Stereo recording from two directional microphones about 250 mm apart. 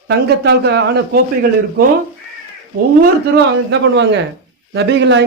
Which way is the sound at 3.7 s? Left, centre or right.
Right.